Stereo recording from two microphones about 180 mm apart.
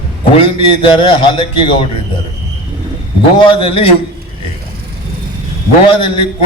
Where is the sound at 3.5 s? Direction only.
30° left (ahead or behind).